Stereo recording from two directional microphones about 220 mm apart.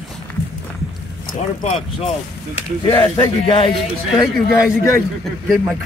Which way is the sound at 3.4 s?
25° left (ahead or behind).